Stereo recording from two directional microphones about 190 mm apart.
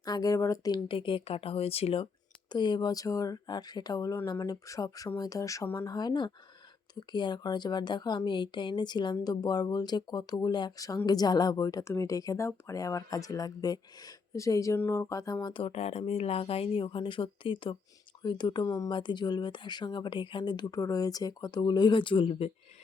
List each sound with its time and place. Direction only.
0.0 s speech: 20° left (ahead or behind)